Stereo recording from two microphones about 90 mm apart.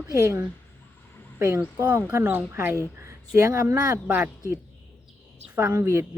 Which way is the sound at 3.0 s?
35° right (ahead or behind).